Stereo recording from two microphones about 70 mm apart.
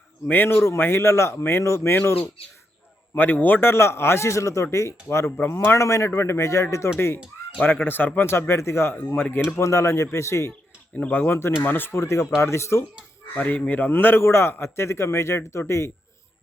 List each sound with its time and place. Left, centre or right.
0.3 s a man's voice: left
3.2 s a man's voice: left
7.9 s a man's voice: left
9.6 s a man's voice: left
10.9 s speech: left
11.3 s a man's voice: left
13.3 s a man's voice: left